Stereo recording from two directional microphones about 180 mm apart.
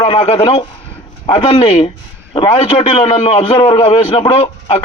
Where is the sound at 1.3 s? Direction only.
25° left (ahead or behind).